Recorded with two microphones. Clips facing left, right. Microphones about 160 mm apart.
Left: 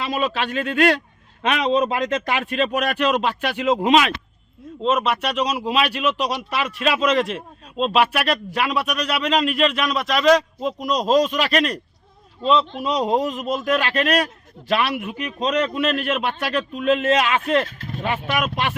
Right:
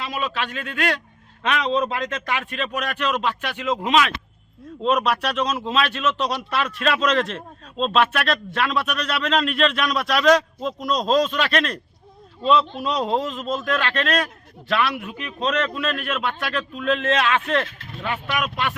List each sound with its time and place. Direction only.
0.0 s a man's voice: 25° left (ahead or behind)
4.8 s a man's voice: centre (ahead or behind)
12.4 s a man's voice: 5° right (ahead or behind)
12.9 s a man's voice: 10° left (ahead or behind)